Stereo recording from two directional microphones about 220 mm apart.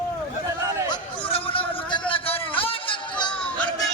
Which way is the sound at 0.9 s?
25° left (ahead or behind).